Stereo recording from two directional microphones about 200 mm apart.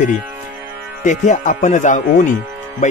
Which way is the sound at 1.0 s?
35° left (ahead or behind).